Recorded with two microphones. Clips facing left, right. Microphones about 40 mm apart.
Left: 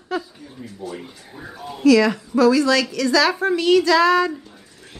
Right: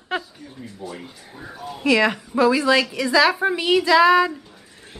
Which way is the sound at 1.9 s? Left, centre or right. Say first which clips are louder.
Left 4 dB; right.